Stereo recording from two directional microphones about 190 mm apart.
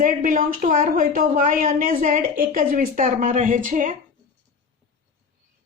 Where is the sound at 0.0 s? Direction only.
45° right (ahead or behind).